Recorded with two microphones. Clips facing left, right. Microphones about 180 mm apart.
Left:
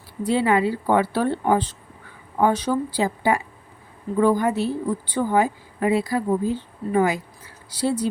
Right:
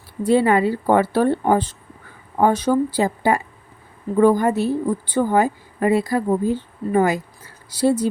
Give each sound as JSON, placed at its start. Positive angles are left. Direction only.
{"t": 0.3, "sound": "a woman's voice", "side_deg": -45}